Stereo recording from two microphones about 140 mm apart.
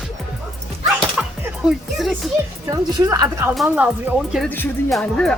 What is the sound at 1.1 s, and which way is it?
Music, 5° right (ahead or behind).